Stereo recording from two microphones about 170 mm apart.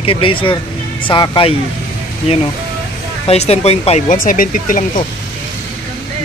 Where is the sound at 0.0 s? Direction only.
30° left (ahead or behind).